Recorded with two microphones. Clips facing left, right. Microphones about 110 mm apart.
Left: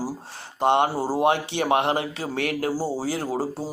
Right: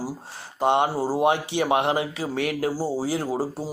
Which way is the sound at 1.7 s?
40° left (ahead or behind).